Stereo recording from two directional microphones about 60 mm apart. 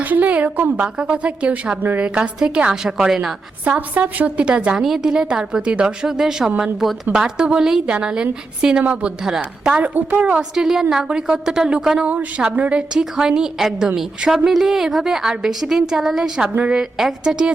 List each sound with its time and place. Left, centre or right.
0.0 s a woman's voice: right; by 3.3 s centre
3.6 s a woman's voice: right
9.2 s a woman's voice: centre
9.8 s a woman's voice: right
10.5 s a woman's voice: centre
12.9 s a woman's voice: centre